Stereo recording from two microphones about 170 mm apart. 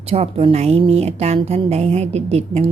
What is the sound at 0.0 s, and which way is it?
Speech, 35° right (ahead or behind).